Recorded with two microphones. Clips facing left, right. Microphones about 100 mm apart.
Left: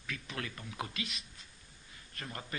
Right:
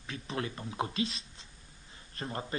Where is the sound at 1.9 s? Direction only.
30° right (ahead or behind).